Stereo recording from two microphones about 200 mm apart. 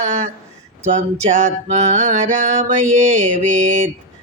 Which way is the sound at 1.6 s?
35° right (ahead or behind).